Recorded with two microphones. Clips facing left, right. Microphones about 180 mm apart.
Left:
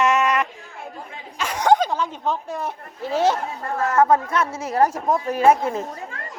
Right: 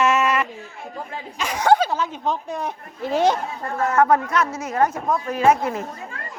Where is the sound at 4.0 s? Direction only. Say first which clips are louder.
Even; 25° left (ahead or behind).